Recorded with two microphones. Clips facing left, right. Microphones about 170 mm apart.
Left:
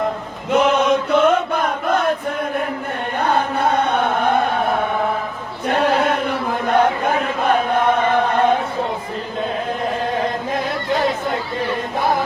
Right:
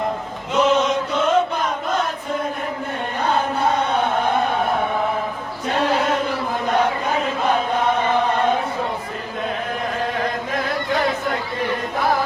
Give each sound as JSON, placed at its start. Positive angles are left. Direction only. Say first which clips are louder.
{"t": 0.5, "sound": "chant", "louder": "left 2 dB", "side_deg": 60}
{"t": 5.6, "sound": "chant", "louder": "left 3 dB", "side_deg": 60}